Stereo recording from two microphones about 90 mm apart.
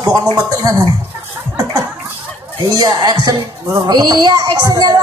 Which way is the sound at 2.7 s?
50° right (ahead or behind).